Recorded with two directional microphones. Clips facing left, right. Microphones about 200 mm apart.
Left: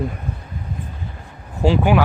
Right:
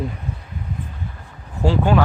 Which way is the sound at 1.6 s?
15° left (ahead or behind).